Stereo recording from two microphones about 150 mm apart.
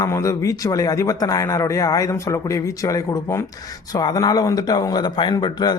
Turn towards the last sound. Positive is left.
turn(degrees=25)  # may be behind; listen again after turning